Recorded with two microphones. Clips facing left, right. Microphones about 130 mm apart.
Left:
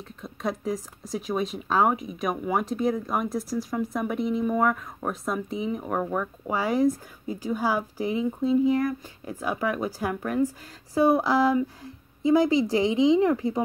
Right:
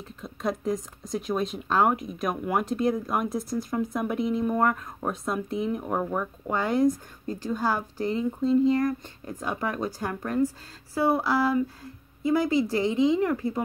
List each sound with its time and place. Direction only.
0.0 s speech: centre (ahead or behind); by 13.6 s 15° left (ahead or behind)